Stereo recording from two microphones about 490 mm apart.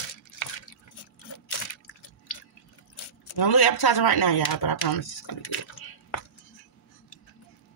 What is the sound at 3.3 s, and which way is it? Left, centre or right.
Speech, left.